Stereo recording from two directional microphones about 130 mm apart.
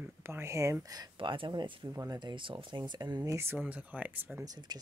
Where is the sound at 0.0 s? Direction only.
20° right (ahead or behind).